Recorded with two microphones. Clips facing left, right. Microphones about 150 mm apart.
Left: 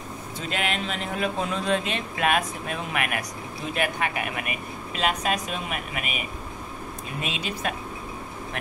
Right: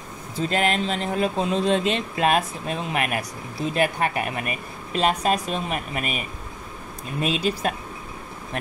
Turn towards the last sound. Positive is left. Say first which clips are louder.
# right 6 dB
turn(degrees=-40)  # may be behind; listen again after turning